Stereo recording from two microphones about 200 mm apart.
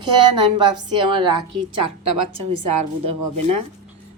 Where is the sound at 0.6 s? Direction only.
25° right (ahead or behind).